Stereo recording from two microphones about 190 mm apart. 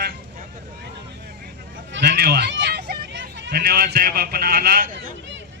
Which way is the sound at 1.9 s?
55° right (ahead or behind).